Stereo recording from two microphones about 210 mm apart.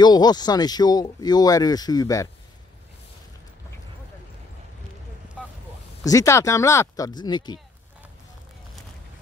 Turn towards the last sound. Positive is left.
turn(degrees=20)  # may be behind; listen again after turning